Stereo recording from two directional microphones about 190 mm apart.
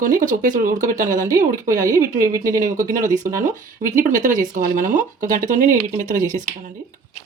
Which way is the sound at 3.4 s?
40° right (ahead or behind).